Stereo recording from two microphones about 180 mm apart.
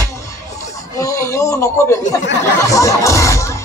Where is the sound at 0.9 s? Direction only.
15° left (ahead or behind).